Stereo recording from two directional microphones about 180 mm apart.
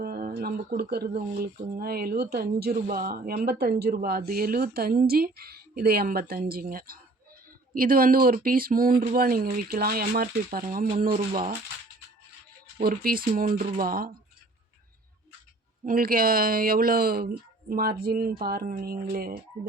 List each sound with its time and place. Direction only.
0.0 s a sound: 55° right (ahead or behind)
1.7 s speech: 55° right (ahead or behind)
12.8 s speech: 55° right (ahead or behind)
15.9 s speech: 50° right (ahead or behind)